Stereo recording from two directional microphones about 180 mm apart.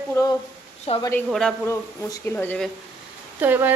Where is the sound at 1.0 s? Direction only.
15° left (ahead or behind).